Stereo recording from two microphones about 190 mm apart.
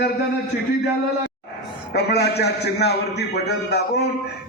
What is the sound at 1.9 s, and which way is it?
A man's voice, 60° left (ahead or behind).